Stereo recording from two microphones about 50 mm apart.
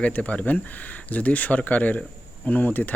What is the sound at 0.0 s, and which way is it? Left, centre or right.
Speech, left.